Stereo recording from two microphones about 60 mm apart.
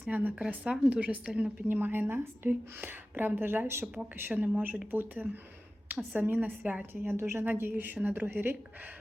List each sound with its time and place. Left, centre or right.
0.1 s a woman's voice: right
7.0 s a woman's voice: right
7.4 s speech: right